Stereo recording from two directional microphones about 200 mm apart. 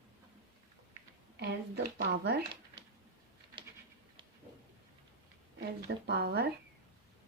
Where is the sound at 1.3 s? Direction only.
55° right (ahead or behind).